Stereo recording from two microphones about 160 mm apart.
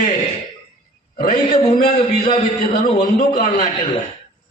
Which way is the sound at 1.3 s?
45° left (ahead or behind).